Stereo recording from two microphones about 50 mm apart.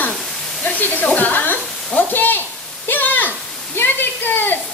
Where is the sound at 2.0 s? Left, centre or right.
Left.